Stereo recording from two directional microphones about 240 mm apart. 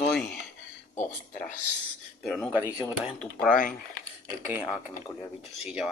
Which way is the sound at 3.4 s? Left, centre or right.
Left.